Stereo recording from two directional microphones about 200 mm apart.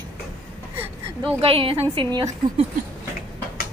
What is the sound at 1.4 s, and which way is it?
A woman's voice, 30° right (ahead or behind).